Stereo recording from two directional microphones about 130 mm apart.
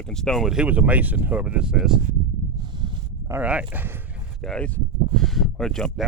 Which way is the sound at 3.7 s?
15° right (ahead or behind).